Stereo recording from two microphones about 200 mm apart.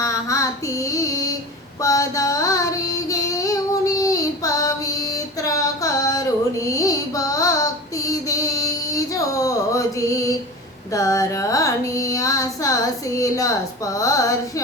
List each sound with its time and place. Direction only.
0.0 s female singing: 15° left (ahead or behind)
1.8 s a sound: 15° left (ahead or behind)
5.1 s female singing: 15° left (ahead or behind)
10.9 s music: 15° left (ahead or behind)